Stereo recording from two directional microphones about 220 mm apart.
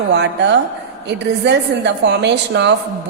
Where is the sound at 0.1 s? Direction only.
50° right (ahead or behind).